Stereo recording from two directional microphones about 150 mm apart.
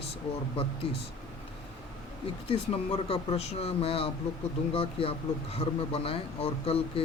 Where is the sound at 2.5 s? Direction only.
40° left (ahead or behind).